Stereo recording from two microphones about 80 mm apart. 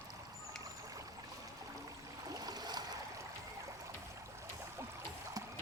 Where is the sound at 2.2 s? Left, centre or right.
Right.